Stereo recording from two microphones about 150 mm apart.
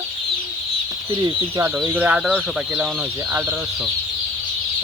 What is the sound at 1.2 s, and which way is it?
Speech, 20° right (ahead or behind).